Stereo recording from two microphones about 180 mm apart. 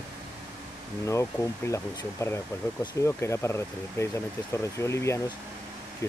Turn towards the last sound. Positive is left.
turn(degrees=15)  # may be behind; listen again after turning